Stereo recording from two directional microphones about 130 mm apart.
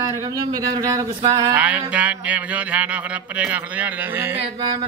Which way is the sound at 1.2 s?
30° right (ahead or behind).